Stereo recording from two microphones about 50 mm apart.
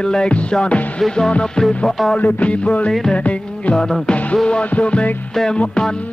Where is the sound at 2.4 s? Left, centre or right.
Left.